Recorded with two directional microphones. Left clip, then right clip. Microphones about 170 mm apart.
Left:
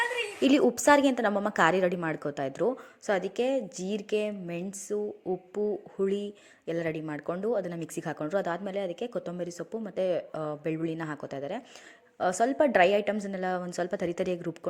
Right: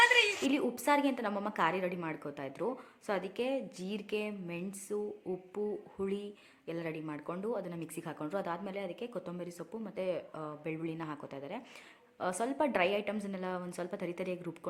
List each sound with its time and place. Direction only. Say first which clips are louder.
0.4 s speech: left 9 dB; 35° left (ahead or behind)